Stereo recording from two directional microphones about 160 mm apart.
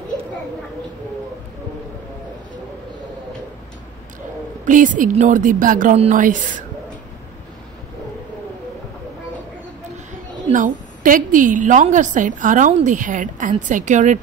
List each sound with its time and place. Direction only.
4.6 s a woman's voice: 55° right (ahead or behind)
10.5 s a woman's voice: 55° right (ahead or behind)